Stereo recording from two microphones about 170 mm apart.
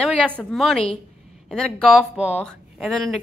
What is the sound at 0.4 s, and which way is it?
Speech, 5° left (ahead or behind).